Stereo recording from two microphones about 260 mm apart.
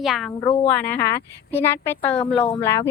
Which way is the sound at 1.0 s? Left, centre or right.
Left.